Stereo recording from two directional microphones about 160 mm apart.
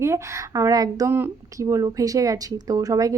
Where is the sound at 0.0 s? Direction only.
20° right (ahead or behind).